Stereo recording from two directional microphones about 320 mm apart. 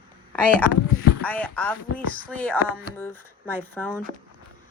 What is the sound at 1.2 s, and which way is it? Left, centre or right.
Speech, centre.